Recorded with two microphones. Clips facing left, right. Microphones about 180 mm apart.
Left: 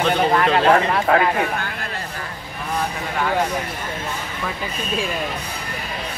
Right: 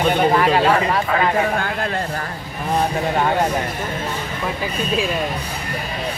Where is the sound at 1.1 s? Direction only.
65° left (ahead or behind).